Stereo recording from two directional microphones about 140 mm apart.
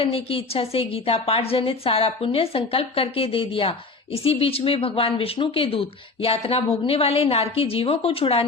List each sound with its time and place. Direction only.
0.0 s a woman's voice: 45° left (ahead or behind)